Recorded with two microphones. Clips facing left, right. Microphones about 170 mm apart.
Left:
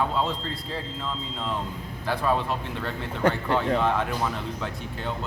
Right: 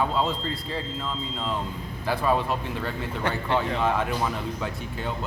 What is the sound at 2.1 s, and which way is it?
Speech, 5° right (ahead or behind).